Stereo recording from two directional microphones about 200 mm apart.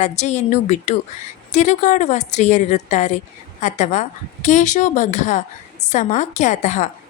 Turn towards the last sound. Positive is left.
turn(degrees=35)  # may be behind; listen again after turning